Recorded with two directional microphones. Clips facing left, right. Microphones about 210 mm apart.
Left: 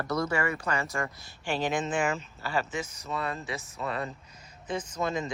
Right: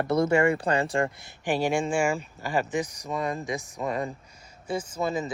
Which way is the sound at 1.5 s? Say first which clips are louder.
Right 4 dB; 10° right (ahead or behind).